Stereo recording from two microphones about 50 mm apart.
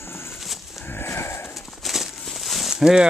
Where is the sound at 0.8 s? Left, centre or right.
Left.